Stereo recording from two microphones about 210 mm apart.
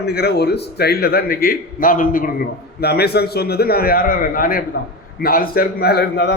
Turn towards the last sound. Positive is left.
turn(degrees=55)  # may be behind; listen again after turning